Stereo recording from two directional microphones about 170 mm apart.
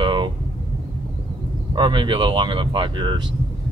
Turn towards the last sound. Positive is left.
turn(degrees=-25)  # may be behind; listen again after turning